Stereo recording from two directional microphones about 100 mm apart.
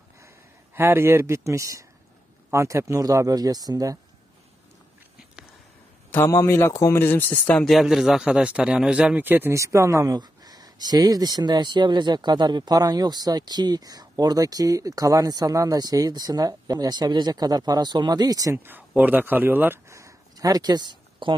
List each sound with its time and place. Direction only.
0.7 s speech: 25° right (ahead or behind)
6.1 s a man's voice: 25° left (ahead or behind)
7.6 s a man's voice: centre (ahead or behind); by 9.6 s 20° right (ahead or behind)
9.6 s speech: 30° right (ahead or behind)
18.6 s a man's voice: 20° right (ahead or behind); by 21.4 s 50° right (ahead or behind)